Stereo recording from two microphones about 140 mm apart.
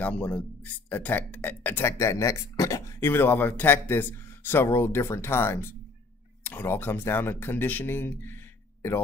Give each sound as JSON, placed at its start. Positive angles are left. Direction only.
{"t": 0.0, "sound": "speech", "side_deg": 15}